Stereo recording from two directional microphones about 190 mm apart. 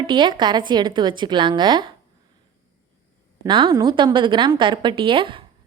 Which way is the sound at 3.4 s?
20° right (ahead or behind).